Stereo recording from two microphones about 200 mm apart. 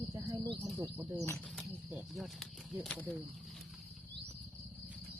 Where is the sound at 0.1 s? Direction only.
25° right (ahead or behind).